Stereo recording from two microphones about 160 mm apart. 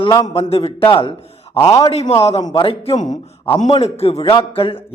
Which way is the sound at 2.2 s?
40° left (ahead or behind).